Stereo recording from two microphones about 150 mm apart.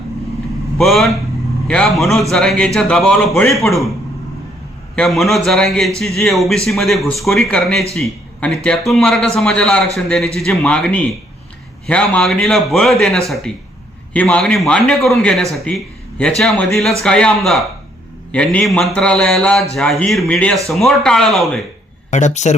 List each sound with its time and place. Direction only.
0.8 s a man's voice: centre (ahead or behind)
4.9 s a man's voice: centre (ahead or behind)
22.1 s speech: 50° left (ahead or behind)